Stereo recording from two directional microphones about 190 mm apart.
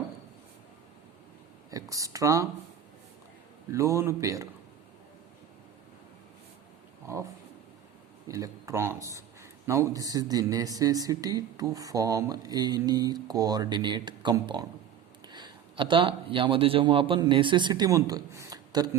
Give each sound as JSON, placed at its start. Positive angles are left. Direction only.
{"t": 1.7, "sound": "speech", "side_deg": -15}
{"t": 3.7, "sound": "speech", "side_deg": -15}
{"t": 7.1, "sound": "speech", "side_deg": -15}
{"t": 8.3, "sound": "a man's voice", "side_deg": -15}